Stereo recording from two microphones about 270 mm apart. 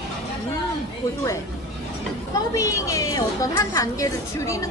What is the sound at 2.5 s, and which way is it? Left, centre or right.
A woman's voice, centre.